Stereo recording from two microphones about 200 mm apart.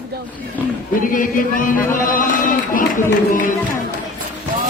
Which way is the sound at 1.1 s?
40° left (ahead or behind).